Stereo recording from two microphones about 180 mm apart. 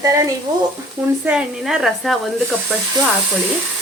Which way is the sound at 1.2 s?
5° right (ahead or behind).